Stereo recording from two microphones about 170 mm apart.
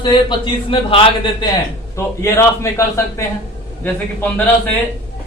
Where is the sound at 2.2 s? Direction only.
15° left (ahead or behind).